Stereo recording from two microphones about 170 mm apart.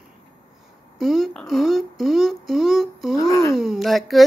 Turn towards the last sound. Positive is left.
turn(degrees=0)  # may be behind; listen again after turning